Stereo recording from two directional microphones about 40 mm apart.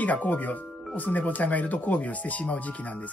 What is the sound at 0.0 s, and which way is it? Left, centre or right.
Speech, left.